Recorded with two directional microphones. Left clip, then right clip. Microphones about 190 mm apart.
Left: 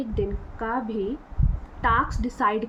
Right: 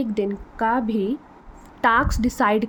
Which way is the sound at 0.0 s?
65° right (ahead or behind).